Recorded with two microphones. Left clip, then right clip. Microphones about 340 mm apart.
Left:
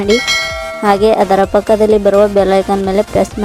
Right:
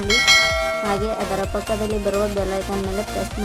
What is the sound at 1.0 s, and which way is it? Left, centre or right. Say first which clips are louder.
Speech: left 14 dB; left.